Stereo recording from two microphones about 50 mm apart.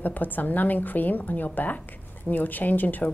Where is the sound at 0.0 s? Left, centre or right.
Left.